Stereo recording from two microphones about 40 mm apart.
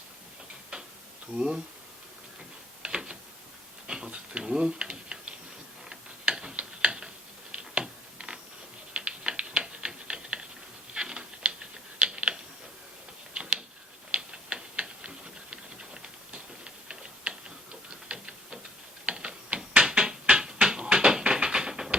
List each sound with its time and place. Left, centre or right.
1.4 s speech: right
2.8 s gears: right
3.8 s a sound: right
5.9 s mechanisms: centre
7.5 s a sound: right
8.9 s typing: right
10.9 s mechanisms: right
13.3 s a sound: right
14.1 s tick-tock: right
16.9 s typing: right
18.1 s tick-tock: right
19.0 s a sound: right